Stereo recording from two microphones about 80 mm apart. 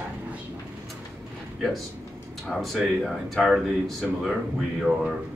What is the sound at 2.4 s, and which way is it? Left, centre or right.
Speech, centre.